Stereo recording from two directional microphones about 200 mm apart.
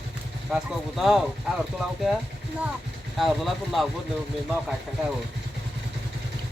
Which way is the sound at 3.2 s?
Centre (ahead or behind).